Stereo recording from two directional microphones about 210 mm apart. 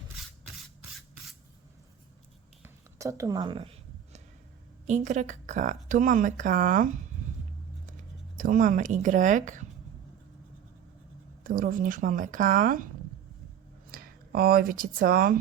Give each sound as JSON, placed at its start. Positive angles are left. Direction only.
{"t": 2.6, "sound": "a sound", "side_deg": -15}
{"t": 4.9, "sound": "a woman's voice", "side_deg": -35}
{"t": 8.4, "sound": "a woman's voice", "side_deg": -40}
{"t": 11.4, "sound": "a woman's voice", "side_deg": -40}
{"t": 13.9, "sound": "speech", "side_deg": -45}